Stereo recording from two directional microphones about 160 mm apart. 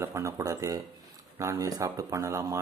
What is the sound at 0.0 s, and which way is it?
Speech, 20° right (ahead or behind).